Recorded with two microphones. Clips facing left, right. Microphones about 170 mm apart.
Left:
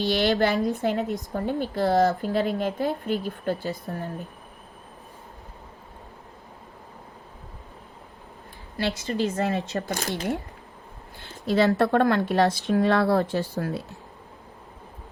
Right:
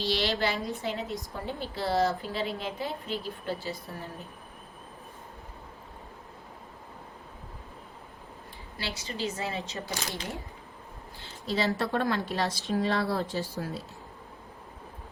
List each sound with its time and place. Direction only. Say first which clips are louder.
0.1 s a woman's voice: left 7 dB; 55° left (ahead or behind)
8.8 s a woman's voice: left 9 dB; 55° left (ahead or behind)